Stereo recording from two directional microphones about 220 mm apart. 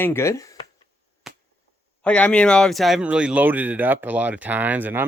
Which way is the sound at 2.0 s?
5° left (ahead or behind).